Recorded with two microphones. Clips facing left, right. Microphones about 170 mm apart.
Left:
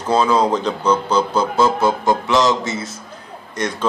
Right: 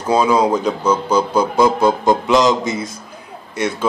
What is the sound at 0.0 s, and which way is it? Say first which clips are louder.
Speech: right 1 dB; 10° right (ahead or behind).